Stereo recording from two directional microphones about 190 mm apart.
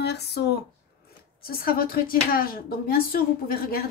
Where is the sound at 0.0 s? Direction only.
60° left (ahead or behind).